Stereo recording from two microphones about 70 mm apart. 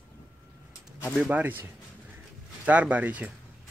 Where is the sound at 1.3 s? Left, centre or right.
Right.